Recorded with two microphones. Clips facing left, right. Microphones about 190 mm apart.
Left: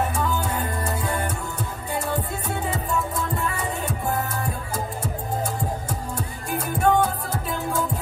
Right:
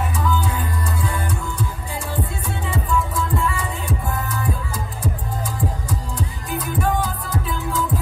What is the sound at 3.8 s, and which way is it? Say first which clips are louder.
Music: left 1 dB; 25° left (ahead or behind).